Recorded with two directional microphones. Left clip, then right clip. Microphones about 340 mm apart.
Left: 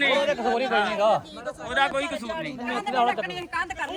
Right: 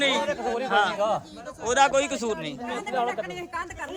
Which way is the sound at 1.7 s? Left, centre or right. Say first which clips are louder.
Right 3 dB; centre.